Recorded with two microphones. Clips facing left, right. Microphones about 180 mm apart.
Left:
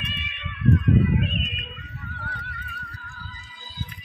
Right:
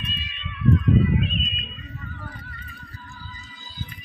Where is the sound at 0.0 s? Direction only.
65° left (ahead or behind).